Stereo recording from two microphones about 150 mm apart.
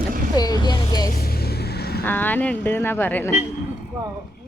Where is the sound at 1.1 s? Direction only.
85° left.